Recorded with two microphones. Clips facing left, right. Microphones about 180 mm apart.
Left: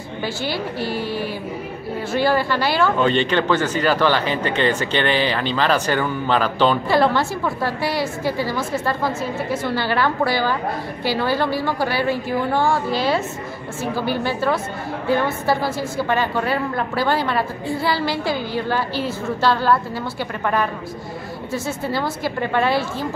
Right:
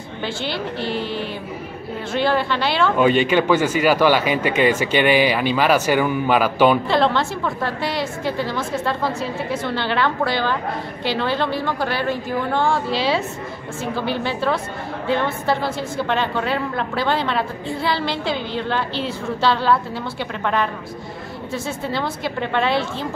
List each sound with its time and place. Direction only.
0.2 s a woman's voice: 5° left (ahead or behind)
0.7 s speech: 25° right (ahead or behind)
2.1 s a woman's voice: 5° left (ahead or behind)
3.0 s speech: 10° right (ahead or behind)
6.9 s a woman's voice: 5° left (ahead or behind)
21.6 s a woman's voice: 5° left (ahead or behind)